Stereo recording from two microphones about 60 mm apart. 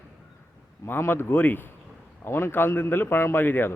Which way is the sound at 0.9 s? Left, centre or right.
Left.